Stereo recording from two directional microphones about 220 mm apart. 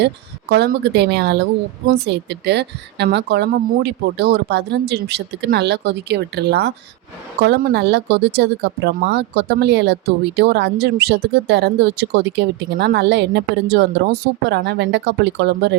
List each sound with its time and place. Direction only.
0.5 s speech: 45° right (ahead or behind)